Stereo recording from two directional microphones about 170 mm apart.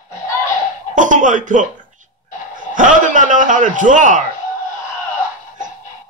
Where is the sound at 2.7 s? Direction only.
50° right (ahead or behind).